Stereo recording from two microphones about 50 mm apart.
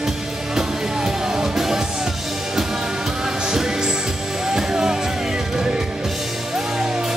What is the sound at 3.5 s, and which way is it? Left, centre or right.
Music, centre.